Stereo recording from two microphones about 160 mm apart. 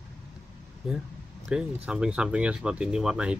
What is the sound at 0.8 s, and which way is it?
Speech, centre (ahead or behind).